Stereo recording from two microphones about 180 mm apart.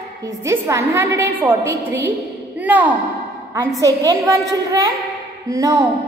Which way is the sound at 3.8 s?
20° right (ahead or behind).